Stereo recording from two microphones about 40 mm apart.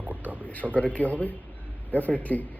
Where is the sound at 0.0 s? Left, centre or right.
Right.